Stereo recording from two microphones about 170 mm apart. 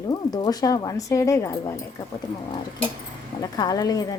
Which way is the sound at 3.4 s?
20° left (ahead or behind).